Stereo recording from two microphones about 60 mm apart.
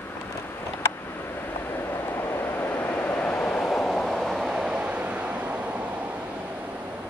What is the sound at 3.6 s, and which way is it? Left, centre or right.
Vehicle, centre.